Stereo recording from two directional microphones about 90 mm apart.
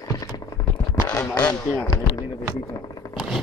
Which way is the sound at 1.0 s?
45° left (ahead or behind).